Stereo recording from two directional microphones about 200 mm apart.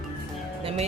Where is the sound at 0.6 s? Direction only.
30° right (ahead or behind).